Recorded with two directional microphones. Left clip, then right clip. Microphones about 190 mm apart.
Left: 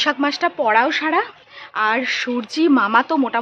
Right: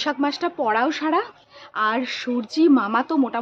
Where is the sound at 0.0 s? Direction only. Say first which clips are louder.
Left 5 dB; centre (ahead or behind).